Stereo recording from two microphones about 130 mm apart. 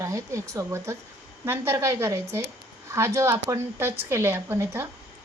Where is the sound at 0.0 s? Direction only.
25° right (ahead or behind).